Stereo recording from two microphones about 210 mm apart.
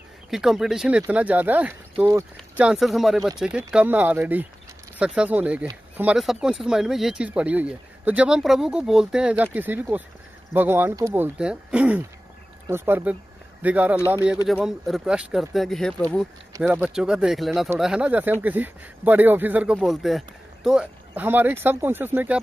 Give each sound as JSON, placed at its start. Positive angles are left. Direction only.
{"t": 0.3, "sound": "speech", "side_deg": 0}
{"t": 16.5, "sound": "speech", "side_deg": -10}